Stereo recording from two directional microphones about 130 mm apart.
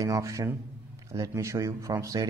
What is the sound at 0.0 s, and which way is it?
Speech, 25° right (ahead or behind).